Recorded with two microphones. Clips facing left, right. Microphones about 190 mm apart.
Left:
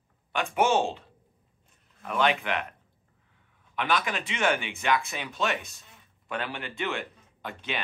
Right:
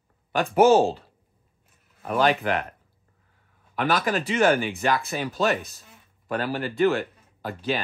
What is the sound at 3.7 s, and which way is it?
Speech, 40° right (ahead or behind).